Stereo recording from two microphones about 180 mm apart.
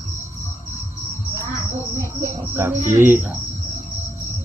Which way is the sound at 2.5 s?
10° right (ahead or behind).